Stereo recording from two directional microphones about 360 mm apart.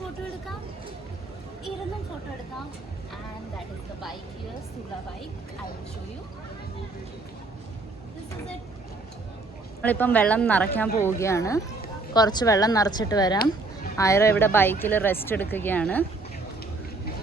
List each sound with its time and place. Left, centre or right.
9.8 s speech: centre